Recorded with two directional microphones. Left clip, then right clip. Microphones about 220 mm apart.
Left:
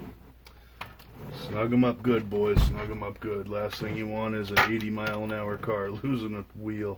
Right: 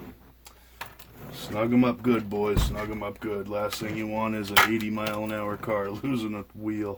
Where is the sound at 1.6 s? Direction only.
30° right (ahead or behind).